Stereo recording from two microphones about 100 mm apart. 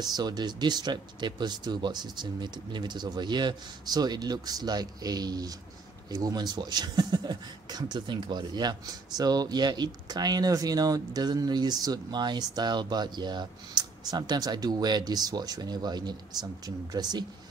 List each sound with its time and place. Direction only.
0.0 s speech: 45° right (ahead or behind)